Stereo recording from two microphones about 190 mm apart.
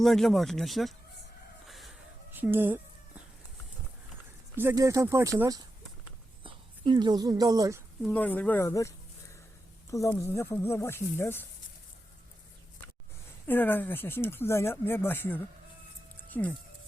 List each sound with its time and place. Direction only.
0.0 s speech: centre (ahead or behind)
1.6 s chicken: centre (ahead or behind)
4.5 s speech: 15° right (ahead or behind)
8.0 s speech: 5° left (ahead or behind)
9.9 s speech: 15° left (ahead or behind)
13.5 s speech: 10° left (ahead or behind)
16.1 s music: 10° left (ahead or behind)